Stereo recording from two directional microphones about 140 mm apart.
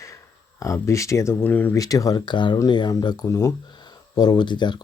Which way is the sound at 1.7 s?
25° left (ahead or behind).